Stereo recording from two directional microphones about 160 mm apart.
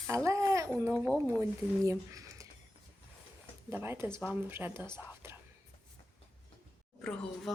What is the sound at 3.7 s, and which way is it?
Speech, 15° right (ahead or behind).